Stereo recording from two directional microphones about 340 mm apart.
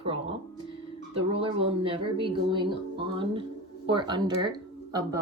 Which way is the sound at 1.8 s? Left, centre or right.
Centre.